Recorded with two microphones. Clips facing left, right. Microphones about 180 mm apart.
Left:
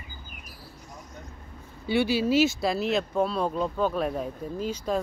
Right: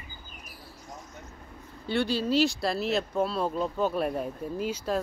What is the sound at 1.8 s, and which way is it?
Speech, 5° left (ahead or behind).